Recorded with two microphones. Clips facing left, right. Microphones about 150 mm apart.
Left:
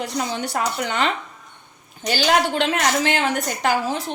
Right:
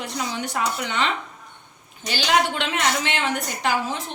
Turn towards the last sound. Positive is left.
turn(degrees=40)  # may be behind; listen again after turning